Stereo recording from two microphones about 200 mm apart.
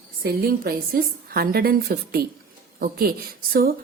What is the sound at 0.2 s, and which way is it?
A woman's voice, 50° right (ahead or behind).